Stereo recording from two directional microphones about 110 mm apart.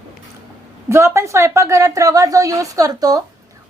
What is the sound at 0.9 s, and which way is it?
A woman's voice, 25° right (ahead or behind).